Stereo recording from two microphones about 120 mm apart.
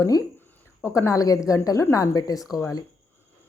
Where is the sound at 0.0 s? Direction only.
30° left (ahead or behind).